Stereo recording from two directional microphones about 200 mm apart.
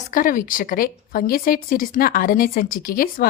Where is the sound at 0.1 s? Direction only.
45° left (ahead or behind).